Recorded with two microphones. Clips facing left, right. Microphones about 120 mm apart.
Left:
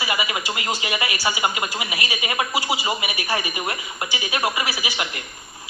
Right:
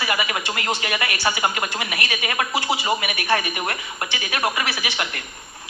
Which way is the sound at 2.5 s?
5° left (ahead or behind).